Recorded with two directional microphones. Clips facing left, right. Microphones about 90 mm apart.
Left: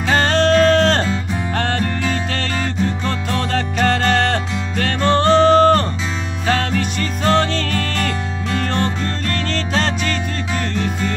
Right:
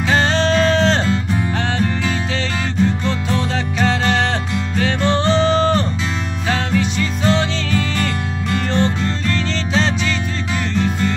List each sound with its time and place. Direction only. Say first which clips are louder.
0.1 s music: left 2 dB; 50° left (ahead or behind)
3.1 s music: even; 50° left (ahead or behind)
9.3 s music: even; 50° left (ahead or behind)